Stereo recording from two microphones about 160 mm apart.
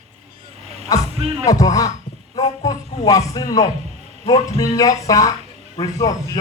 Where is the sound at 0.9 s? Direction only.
20° left (ahead or behind).